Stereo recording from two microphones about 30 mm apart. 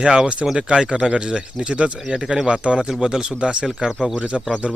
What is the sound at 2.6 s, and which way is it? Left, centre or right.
Speech, right.